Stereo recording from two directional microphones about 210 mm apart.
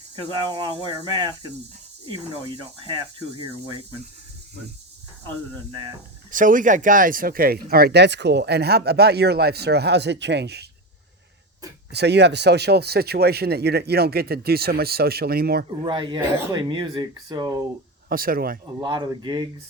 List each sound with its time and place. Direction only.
0.5 s speech: 20° right (ahead or behind)
6.3 s speech: 40° right (ahead or behind)
11.9 s speech: 50° right (ahead or behind)
15.9 s speech: 20° right (ahead or behind)
18.1 s speech: 45° right (ahead or behind)
18.8 s speech: 20° right (ahead or behind)